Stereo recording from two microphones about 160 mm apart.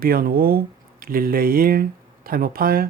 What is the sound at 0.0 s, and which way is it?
Speech, 65° right (ahead or behind).